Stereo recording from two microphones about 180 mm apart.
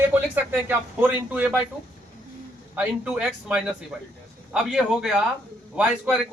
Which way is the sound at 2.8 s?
5° right (ahead or behind).